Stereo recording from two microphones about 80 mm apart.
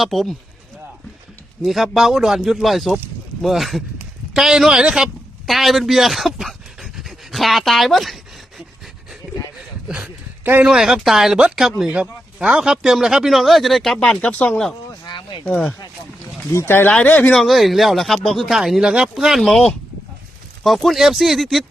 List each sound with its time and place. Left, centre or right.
0.0 s speech: centre
1.6 s a man's voice: centre
5.5 s pant: centre
10.6 s speech: centre
14.2 s speech: centre
15.0 s a sound: left
16.5 s speech: left
16.9 s speech: centre
17.3 s speech: centre